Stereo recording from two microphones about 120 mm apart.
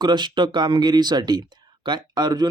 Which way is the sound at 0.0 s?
40° right (ahead or behind).